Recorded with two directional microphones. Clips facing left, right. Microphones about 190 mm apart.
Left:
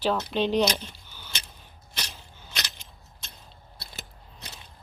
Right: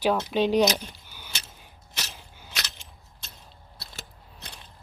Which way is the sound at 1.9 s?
5° right (ahead or behind).